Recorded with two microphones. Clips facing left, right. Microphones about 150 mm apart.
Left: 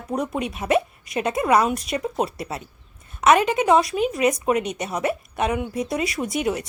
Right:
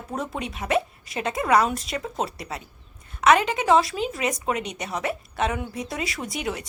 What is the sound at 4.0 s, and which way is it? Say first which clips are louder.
Speech: left 6 dB; 25° right (ahead or behind).